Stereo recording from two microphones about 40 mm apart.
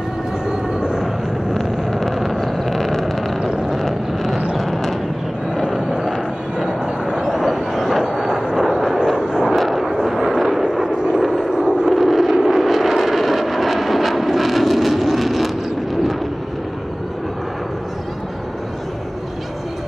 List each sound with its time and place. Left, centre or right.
0.5 s vehicle: centre
1.5 s vehicle: centre
2.4 s a sound: centre
3.3 s vehicle: centre
3.7 s vehicle: centre
5.8 s vehicle: centre
7.1 s vehicle: centre
9.5 s a sound: centre
11.0 s vehicle: centre
11.9 s vehicle: centre